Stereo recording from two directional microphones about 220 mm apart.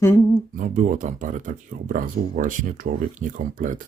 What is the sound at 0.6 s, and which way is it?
Speech, 35° right (ahead or behind).